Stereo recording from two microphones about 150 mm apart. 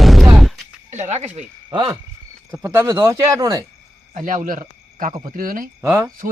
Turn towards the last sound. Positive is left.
turn(degrees=-15)  # may be behind; listen again after turning